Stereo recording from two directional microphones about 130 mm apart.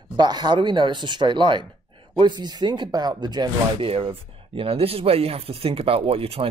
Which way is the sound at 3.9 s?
45° right (ahead or behind).